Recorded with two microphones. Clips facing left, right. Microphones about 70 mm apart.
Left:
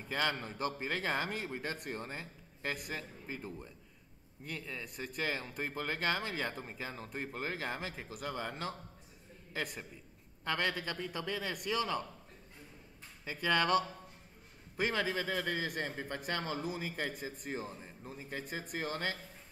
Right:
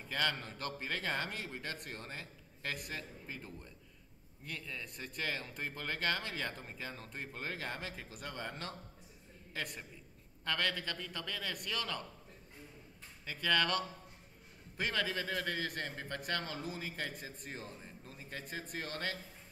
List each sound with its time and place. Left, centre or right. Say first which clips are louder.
0.1 s speech: left 2 dB; centre
13.2 s speech: left 2 dB; centre